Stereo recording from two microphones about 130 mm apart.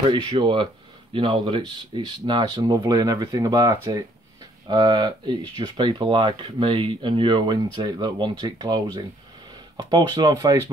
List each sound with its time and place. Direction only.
0.0 s speech: 40° right (ahead or behind)